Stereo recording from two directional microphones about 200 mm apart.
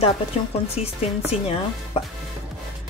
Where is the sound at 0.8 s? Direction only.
35° left (ahead or behind).